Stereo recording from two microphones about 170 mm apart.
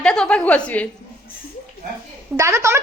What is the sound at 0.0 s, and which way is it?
Speech, 5° left (ahead or behind).